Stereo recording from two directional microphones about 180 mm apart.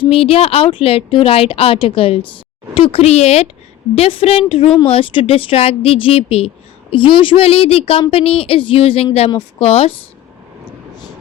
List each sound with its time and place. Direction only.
0.0 s speech: 30° left (ahead or behind)